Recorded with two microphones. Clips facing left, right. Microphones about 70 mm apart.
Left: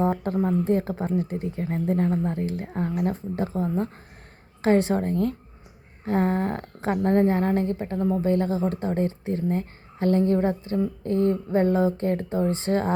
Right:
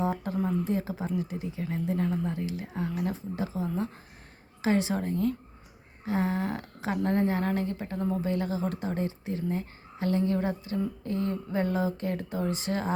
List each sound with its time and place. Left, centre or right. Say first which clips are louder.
0.0 s speech: left 5 dB; left